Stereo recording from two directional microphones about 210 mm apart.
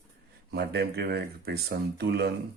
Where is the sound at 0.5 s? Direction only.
50° right (ahead or behind).